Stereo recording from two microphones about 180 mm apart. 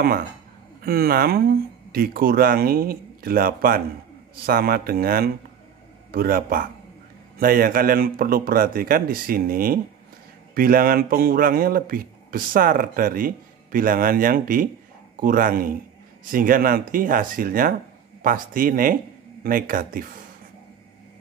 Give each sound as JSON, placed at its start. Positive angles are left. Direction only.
{"t": 0.8, "sound": "speech", "side_deg": -55}